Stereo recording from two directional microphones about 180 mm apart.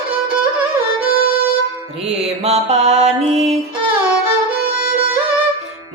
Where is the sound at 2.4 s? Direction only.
40° right (ahead or behind).